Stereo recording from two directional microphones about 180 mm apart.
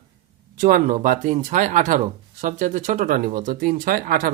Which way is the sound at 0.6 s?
50° right (ahead or behind).